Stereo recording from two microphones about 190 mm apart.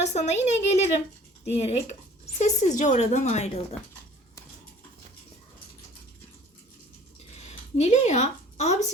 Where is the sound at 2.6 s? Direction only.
40° left (ahead or behind).